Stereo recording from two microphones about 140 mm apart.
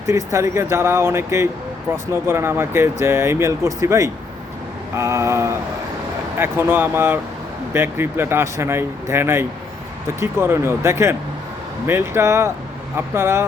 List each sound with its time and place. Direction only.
0.0 s speech: 20° right (ahead or behind)